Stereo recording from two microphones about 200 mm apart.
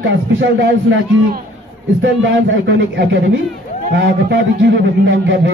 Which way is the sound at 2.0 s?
65° right (ahead or behind).